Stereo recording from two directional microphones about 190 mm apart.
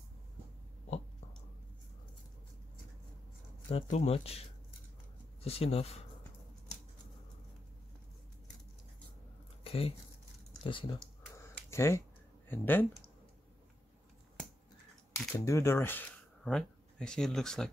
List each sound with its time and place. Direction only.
3.7 s speech: 35° left (ahead or behind)
9.6 s a sound: 30° left (ahead or behind)
10.6 s speech: 25° left (ahead or behind)
11.2 s a sound: 15° left (ahead or behind)
12.4 s speech: 10° left (ahead or behind)
15.1 s speech: 15° left (ahead or behind)